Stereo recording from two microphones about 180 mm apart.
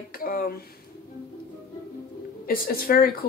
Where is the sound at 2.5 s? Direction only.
55° left (ahead or behind).